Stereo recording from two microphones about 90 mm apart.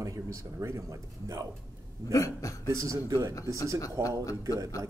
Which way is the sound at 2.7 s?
35° right (ahead or behind).